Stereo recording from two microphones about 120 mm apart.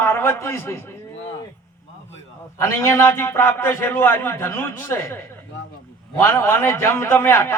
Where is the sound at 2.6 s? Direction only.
20° left (ahead or behind).